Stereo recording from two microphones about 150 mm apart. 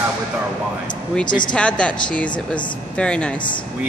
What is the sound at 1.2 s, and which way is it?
Speech, 30° left (ahead or behind).